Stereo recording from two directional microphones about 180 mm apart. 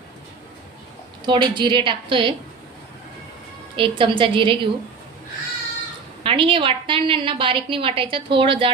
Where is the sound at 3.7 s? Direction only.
30° right (ahead or behind).